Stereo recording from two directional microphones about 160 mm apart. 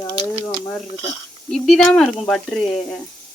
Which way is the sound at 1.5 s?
5° left (ahead or behind).